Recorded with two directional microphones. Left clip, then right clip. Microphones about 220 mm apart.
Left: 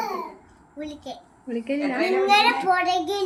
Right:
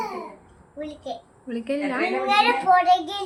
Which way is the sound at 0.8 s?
Centre (ahead or behind).